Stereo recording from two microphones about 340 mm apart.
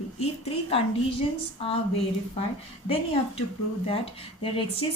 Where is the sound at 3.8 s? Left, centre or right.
Centre.